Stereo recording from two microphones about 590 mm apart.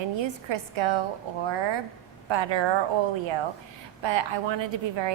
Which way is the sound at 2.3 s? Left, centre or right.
Right.